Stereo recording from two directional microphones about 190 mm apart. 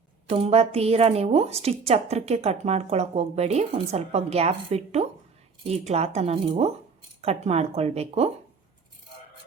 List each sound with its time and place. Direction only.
0.3 s a woman's voice: 35° right (ahead or behind)